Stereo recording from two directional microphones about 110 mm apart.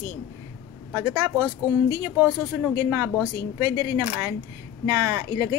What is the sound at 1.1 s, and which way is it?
Speech, 35° right (ahead or behind).